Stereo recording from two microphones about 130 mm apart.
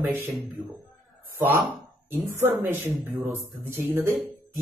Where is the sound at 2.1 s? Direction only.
15° right (ahead or behind).